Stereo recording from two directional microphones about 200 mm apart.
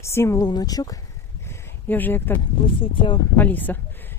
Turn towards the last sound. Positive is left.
turn(degrees=10)  # may be behind; listen again after turning